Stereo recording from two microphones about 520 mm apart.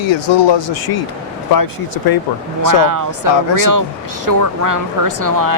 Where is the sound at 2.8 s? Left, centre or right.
Right.